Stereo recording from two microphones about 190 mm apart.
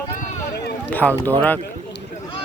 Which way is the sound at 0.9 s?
10° left (ahead or behind).